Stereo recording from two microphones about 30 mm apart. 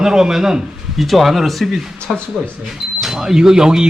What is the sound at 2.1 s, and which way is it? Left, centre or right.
A man's voice, centre.